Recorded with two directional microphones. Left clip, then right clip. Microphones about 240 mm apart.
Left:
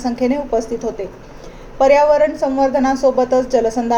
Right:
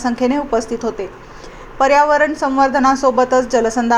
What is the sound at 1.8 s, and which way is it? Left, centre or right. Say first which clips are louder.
Speech: left 1 dB; centre.